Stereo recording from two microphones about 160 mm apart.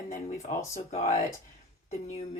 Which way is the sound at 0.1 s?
50° left (ahead or behind).